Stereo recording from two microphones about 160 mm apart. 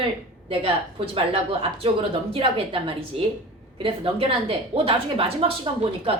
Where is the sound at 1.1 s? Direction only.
35° right (ahead or behind).